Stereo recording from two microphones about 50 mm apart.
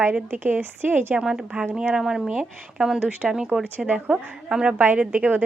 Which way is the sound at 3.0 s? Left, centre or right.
Right.